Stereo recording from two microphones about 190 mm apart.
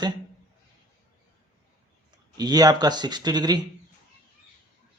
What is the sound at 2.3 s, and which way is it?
Speech, 20° right (ahead or behind).